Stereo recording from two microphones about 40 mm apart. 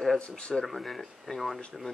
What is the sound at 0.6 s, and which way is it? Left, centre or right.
Speech, centre.